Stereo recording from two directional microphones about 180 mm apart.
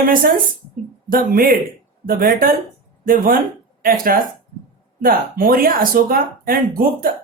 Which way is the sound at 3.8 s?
50° right (ahead or behind).